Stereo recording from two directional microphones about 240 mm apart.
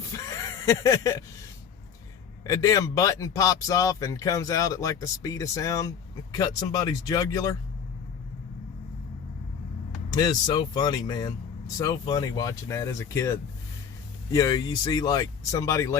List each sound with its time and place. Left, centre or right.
0.1 s a sound: centre
2.4 s speech: centre
10.1 s speech: centre